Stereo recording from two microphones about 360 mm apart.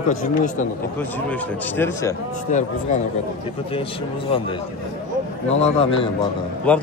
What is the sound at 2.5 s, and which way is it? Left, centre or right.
Speech, centre.